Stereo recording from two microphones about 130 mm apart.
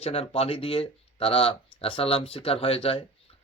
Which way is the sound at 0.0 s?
50° left (ahead or behind).